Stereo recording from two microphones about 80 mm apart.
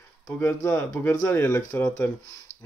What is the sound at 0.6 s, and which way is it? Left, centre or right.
Speech, left.